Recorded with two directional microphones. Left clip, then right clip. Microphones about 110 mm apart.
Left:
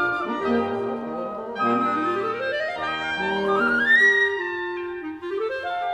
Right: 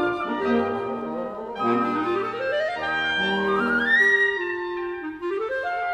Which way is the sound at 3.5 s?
40° left (ahead or behind).